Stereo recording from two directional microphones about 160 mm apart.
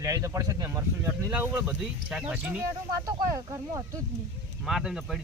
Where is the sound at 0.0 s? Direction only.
20° right (ahead or behind).